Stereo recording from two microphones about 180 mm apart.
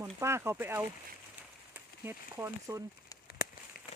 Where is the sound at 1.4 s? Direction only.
10° right (ahead or behind).